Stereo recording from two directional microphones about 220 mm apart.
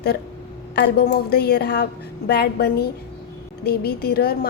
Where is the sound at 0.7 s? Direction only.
45° left (ahead or behind).